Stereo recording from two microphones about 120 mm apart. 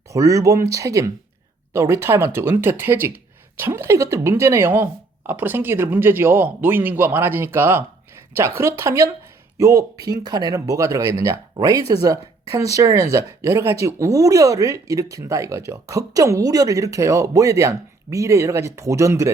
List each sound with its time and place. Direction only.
0.1 s speech: 25° right (ahead or behind)